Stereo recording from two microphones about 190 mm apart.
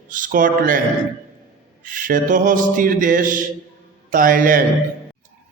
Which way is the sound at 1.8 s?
45° right (ahead or behind).